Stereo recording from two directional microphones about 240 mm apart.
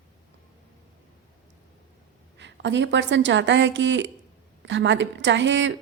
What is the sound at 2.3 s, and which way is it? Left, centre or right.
A woman's voice, right.